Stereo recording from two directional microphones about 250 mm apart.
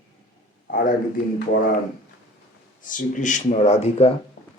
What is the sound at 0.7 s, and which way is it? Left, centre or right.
Speech, left.